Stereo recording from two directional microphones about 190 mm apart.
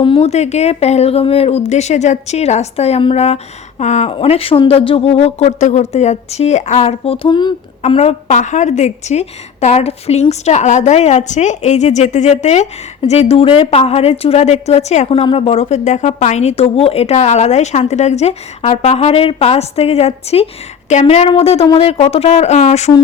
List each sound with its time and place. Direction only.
0.0 s a woman's voice: 30° left (ahead or behind)